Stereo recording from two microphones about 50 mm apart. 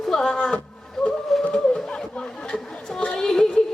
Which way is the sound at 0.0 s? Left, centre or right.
Centre.